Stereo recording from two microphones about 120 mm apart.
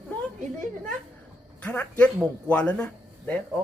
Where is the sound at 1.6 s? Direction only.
15° left (ahead or behind).